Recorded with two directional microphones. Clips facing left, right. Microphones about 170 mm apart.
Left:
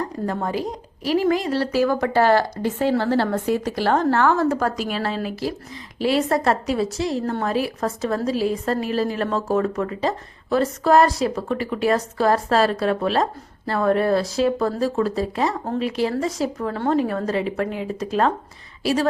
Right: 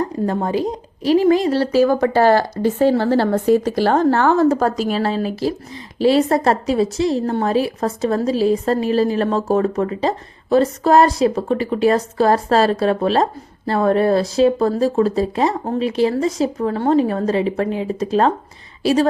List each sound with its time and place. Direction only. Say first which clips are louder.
0.3 s a woman's voice: right 4 dB; 25° right (ahead or behind)